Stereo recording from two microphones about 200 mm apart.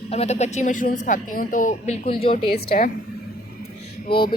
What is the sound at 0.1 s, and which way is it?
A woman's voice, 30° left (ahead or behind).